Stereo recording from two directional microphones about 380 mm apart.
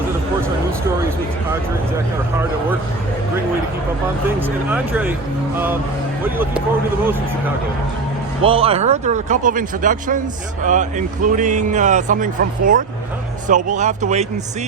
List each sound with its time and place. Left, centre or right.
4.3 s speech: centre
8.4 s speech: centre